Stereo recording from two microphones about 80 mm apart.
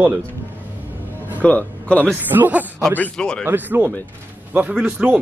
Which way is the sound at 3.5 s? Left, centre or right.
Right.